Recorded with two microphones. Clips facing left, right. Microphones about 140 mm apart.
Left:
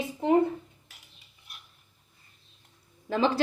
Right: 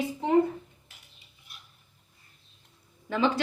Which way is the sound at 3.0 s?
35° left (ahead or behind).